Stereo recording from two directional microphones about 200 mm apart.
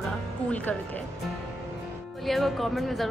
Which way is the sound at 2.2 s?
Centre (ahead or behind).